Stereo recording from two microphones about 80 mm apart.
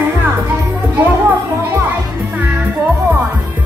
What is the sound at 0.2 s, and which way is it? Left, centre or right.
Music, right.